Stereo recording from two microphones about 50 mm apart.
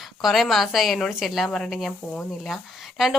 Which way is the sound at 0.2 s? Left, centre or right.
Centre.